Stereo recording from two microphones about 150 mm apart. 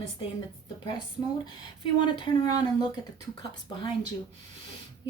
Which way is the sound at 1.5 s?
35° left (ahead or behind).